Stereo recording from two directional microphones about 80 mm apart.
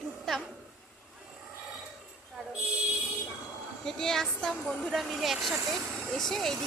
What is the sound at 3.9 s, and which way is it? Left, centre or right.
A woman's voice, centre.